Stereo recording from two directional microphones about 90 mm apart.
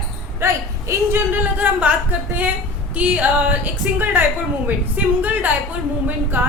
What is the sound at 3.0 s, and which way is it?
A woman's voice, 15° right (ahead or behind).